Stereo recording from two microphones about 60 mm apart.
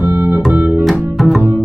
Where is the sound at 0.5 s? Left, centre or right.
Right.